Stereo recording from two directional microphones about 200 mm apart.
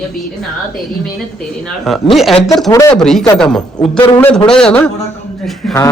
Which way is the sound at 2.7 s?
15° left (ahead or behind).